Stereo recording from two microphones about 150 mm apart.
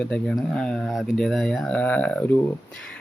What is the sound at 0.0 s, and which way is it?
Speech, 5° left (ahead or behind).